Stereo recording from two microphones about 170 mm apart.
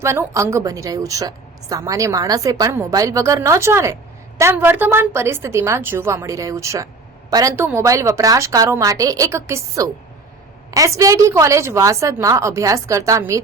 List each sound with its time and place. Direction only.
0.0 s a woman's voice: 15° right (ahead or behind)